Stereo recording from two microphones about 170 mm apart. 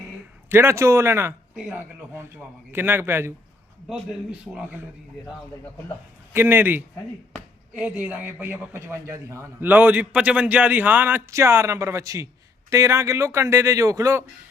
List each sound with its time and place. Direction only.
0.4 s a man's voice: 15° right (ahead or behind)
4.5 s a man's voice: 10° right (ahead or behind)
6.3 s a man's voice: 10° right (ahead or behind)